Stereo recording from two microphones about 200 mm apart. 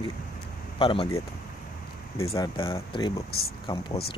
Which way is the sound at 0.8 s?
25° left (ahead or behind).